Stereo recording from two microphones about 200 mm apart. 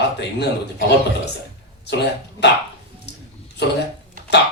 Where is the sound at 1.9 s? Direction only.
60° left (ahead or behind).